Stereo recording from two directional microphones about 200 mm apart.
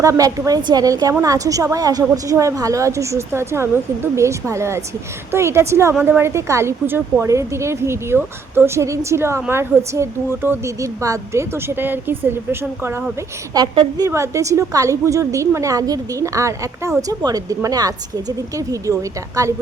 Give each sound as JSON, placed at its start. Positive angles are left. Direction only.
{"t": 0.0, "sound": "a woman's voice", "side_deg": -15}